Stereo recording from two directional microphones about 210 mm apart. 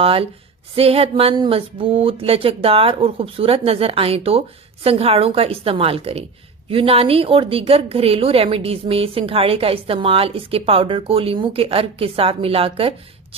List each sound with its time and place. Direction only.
0.0 s a woman's voice: 25° right (ahead or behind)